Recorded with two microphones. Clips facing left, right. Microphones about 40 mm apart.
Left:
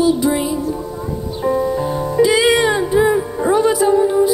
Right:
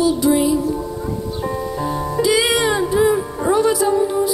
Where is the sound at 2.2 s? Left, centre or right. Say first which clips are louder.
Left 4 dB; left.